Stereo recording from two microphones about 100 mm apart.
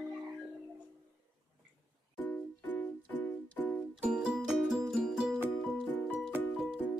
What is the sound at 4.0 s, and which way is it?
Music, 10° right (ahead or behind).